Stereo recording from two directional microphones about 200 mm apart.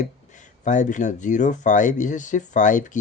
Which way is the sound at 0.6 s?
40° left (ahead or behind).